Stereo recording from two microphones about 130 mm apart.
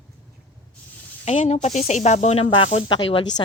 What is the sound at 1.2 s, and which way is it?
A woman's voice, 55° left (ahead or behind).